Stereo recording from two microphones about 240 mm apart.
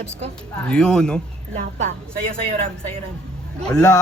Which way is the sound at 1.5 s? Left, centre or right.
Right.